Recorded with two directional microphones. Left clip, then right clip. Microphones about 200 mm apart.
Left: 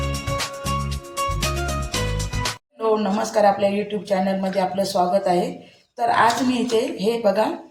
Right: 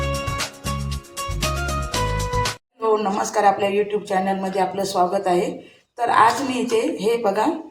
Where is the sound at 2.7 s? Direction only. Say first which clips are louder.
Right 1 dB; 15° right (ahead or behind).